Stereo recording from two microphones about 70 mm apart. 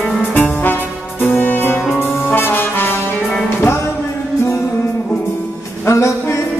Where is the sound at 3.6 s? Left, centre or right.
Left.